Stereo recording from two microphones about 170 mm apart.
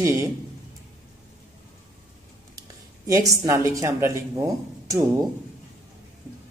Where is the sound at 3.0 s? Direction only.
20° right (ahead or behind).